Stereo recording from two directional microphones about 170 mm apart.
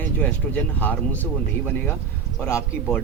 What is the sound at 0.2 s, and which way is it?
Speech, 10° left (ahead or behind).